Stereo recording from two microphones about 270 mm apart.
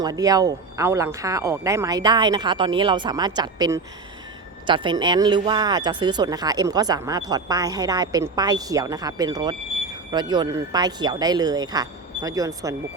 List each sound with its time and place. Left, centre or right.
0.0 s speech: centre